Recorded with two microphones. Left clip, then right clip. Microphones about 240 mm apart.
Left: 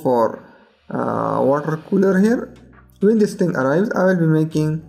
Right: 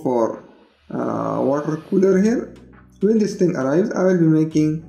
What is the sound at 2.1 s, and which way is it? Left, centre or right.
Speech, left.